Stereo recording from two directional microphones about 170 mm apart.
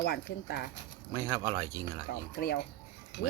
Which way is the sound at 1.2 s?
20° right (ahead or behind).